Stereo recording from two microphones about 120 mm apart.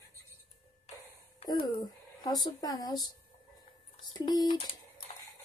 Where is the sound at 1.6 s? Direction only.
35° left (ahead or behind).